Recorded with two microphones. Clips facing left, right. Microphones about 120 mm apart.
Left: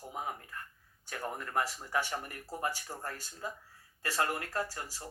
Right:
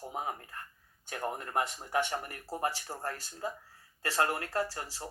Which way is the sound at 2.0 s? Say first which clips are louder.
Right 3 dB; 25° right (ahead or behind).